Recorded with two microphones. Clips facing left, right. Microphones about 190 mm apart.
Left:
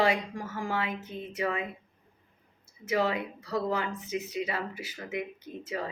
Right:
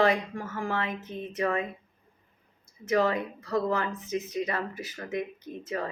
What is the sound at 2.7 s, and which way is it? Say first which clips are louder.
Speech: right 3 dB; 10° left (ahead or behind).